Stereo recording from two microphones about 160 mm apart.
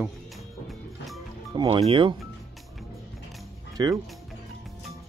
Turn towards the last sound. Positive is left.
turn(degrees=-25)  # may be behind; listen again after turning